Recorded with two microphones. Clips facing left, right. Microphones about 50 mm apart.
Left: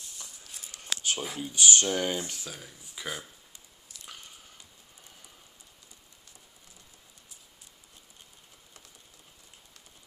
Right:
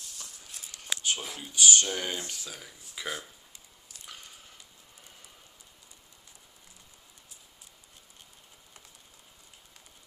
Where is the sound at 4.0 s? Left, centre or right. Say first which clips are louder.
Left 1 dB; right.